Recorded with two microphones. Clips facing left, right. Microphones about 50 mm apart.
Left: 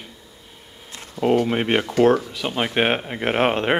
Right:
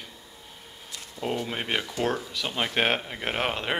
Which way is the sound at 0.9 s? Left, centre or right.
Left.